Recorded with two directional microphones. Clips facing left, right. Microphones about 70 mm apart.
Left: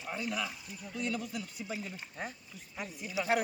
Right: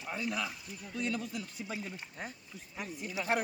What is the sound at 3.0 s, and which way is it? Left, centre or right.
Speech, centre.